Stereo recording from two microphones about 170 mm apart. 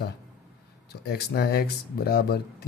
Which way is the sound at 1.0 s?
70° left (ahead or behind).